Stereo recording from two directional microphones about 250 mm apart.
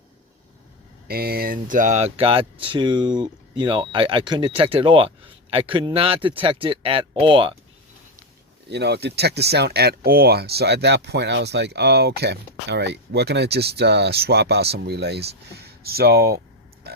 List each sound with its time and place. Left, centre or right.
1.0 s speech: right; by 7.5 s centre
8.7 s speech: right
16.9 s a sound: right